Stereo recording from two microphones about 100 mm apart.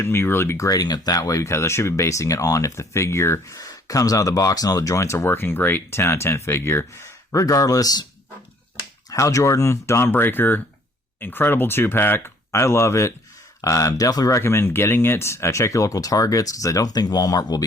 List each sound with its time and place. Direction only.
0.0 s speech: 25° left (ahead or behind)
9.0 s speech: 30° left (ahead or behind)